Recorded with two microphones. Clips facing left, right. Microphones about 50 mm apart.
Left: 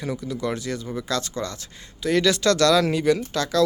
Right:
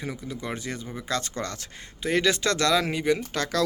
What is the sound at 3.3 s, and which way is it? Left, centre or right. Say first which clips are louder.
Speech: left 5 dB; right.